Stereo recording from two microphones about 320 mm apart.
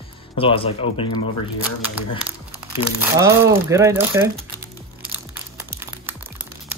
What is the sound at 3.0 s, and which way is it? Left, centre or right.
Speech, centre.